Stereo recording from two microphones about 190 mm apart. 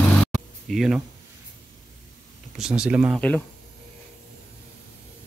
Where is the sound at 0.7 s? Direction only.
Centre (ahead or behind).